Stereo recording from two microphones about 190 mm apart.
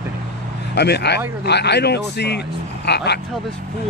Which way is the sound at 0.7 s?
60° left (ahead or behind).